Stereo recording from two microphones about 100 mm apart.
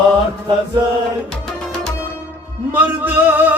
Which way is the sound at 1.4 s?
5° left (ahead or behind).